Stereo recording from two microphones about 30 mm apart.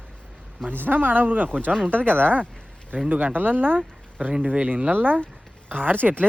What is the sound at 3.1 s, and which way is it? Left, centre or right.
Speech, right.